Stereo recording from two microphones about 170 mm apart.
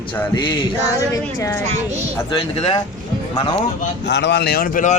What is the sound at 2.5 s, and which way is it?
Speech, 35° left (ahead or behind).